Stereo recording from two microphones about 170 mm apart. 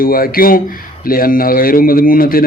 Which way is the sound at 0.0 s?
60° left (ahead or behind).